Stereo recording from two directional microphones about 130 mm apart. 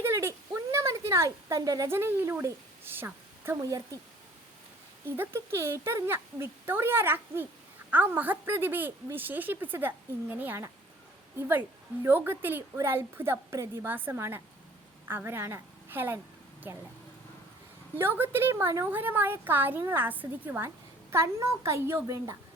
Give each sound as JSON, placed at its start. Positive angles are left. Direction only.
{"t": 0.0, "sound": "a sound", "side_deg": -20}
{"t": 5.0, "sound": "a woman's voice", "side_deg": -20}
{"t": 17.9, "sound": "a woman's voice", "side_deg": -15}